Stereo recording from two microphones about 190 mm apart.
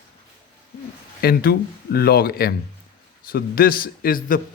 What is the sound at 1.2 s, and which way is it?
Speech, 50° left (ahead or behind).